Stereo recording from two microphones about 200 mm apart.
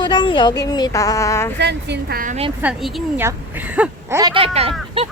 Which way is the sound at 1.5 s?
55° right (ahead or behind).